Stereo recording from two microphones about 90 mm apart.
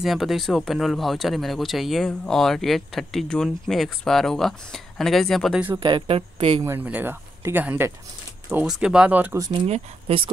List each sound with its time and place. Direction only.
0.0 s speech: centre (ahead or behind)
5.5 s speech: 15° right (ahead or behind)
5.8 s speech: 65° right (ahead or behind); by 6.6 s 90° right
6.8 s speech: 20° right (ahead or behind)
8.6 s speech: 5° right (ahead or behind)
10.0 s speech: 90° right